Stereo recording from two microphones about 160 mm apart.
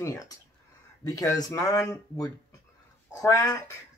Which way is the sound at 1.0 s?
20° left (ahead or behind).